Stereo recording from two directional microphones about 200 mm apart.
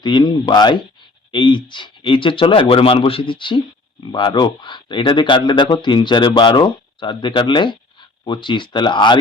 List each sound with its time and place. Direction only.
0.0 s speech: 20° left (ahead or behind)